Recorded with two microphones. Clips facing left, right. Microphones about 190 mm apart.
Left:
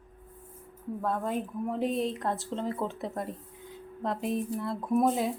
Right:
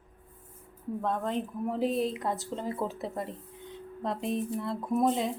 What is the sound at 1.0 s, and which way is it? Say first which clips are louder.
Speech: even; 5° left (ahead or behind).